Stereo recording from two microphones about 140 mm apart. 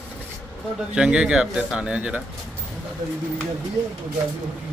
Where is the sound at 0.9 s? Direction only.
5° right (ahead or behind).